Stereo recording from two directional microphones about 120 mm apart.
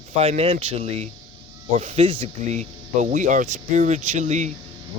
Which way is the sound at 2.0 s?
45° right (ahead or behind).